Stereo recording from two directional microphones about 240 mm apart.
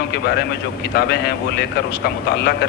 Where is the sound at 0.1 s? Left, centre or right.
Left.